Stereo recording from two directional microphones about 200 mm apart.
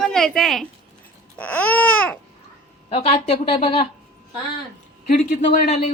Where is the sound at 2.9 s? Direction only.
30° left (ahead or behind).